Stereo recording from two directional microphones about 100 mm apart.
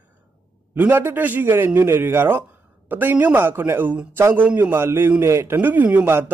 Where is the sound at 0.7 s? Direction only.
20° right (ahead or behind).